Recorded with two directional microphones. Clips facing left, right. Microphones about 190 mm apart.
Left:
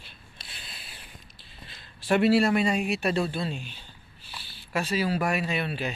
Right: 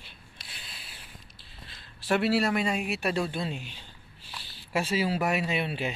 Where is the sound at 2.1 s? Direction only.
5° right (ahead or behind).